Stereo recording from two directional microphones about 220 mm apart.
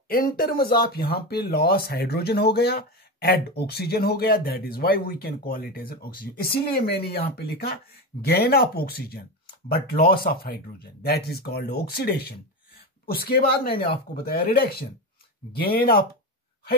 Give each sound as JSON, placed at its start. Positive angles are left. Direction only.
{"t": 0.1, "sound": "speech", "side_deg": 40}